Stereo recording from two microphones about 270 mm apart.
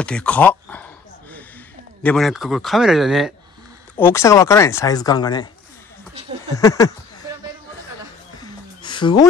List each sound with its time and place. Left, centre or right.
0.0 s speech: centre
2.0 s a man's voice: centre
3.9 s speech: centre
6.5 s speech: centre
8.4 s a sound: centre